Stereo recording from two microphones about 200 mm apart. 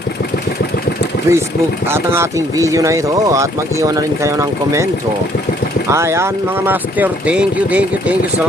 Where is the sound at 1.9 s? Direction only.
10° right (ahead or behind).